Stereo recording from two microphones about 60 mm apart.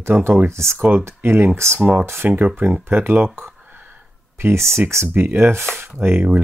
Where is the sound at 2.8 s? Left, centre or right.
Right.